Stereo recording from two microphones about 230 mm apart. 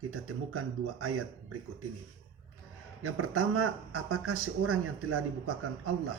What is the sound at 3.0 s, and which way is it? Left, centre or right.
Speech, right.